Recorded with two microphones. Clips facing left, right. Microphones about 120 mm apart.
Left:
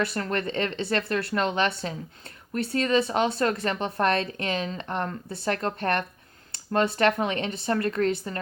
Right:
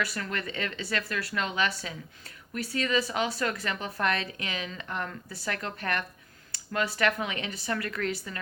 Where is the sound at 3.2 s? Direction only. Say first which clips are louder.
Left 6 dB; 25° left (ahead or behind).